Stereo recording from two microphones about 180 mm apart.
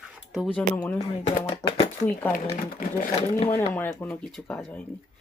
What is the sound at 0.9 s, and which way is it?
Speech, 35° left (ahead or behind).